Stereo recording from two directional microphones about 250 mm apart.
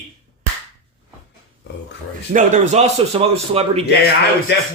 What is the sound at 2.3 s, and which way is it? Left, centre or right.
Speech, right.